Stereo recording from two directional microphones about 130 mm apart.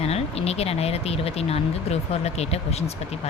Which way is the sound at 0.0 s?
50° left (ahead or behind).